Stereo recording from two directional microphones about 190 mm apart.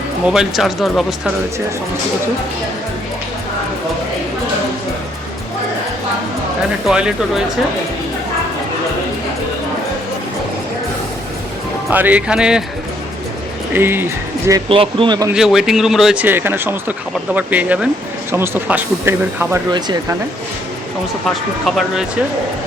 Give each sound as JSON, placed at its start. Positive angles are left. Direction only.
{"t": 0.3, "sound": "speech", "side_deg": 0}
{"t": 6.8, "sound": "speech", "side_deg": -5}
{"t": 11.9, "sound": "speech", "side_deg": -10}
{"t": 13.7, "sound": "speech", "side_deg": -10}
{"t": 14.7, "sound": "speech", "side_deg": -30}
{"t": 15.3, "sound": "speech", "side_deg": 0}
{"t": 19.7, "sound": "speech", "side_deg": -20}
{"t": 21.8, "sound": "speech", "side_deg": -5}